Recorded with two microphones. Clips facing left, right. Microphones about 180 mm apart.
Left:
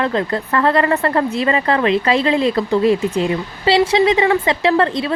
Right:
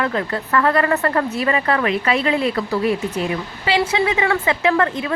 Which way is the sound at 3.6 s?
30° left (ahead or behind).